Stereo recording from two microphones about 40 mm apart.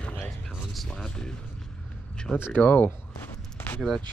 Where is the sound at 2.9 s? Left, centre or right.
Left.